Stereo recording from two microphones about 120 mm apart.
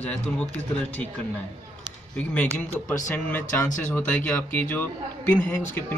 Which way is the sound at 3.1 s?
15° left (ahead or behind).